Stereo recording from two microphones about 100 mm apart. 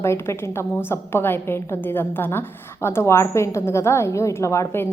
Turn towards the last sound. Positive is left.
turn(degrees=25)  # may be behind; listen again after turning